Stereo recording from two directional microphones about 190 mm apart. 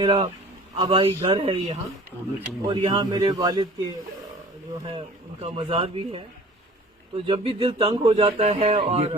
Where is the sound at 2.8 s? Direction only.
25° right (ahead or behind).